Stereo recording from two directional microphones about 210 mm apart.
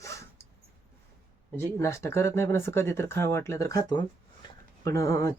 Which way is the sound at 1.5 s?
15° left (ahead or behind).